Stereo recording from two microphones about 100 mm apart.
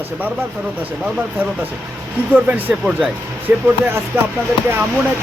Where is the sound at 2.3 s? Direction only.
20° right (ahead or behind).